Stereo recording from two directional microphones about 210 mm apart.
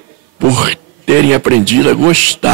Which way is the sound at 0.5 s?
10° right (ahead or behind).